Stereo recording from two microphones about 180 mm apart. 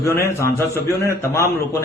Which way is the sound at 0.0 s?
15° left (ahead or behind).